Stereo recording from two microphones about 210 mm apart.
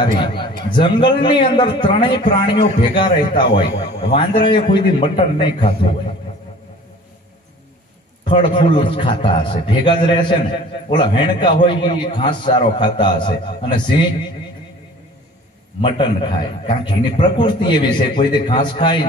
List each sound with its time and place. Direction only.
0.0 s a man's voice: 25° left (ahead or behind)
8.3 s a man's voice: 25° left (ahead or behind)
15.8 s a man's voice: 25° left (ahead or behind)